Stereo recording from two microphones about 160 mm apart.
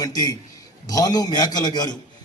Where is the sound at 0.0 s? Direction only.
25° left (ahead or behind).